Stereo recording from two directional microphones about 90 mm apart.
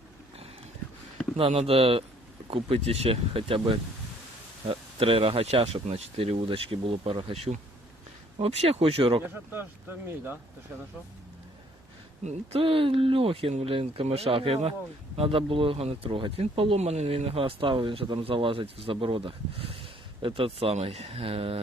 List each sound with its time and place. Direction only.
1.4 s speech: 90° right
8.4 s speech: 90° right
9.2 s speech: 25° right (ahead or behind)
12.5 s speech: 90° right